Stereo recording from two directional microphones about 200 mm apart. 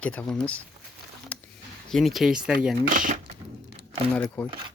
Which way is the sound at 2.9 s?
40° right (ahead or behind).